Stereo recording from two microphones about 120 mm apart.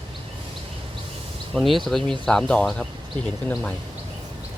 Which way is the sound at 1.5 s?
Centre (ahead or behind).